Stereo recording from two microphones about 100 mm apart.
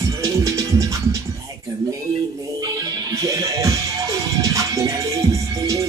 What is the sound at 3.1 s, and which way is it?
Music, 35° right (ahead or behind).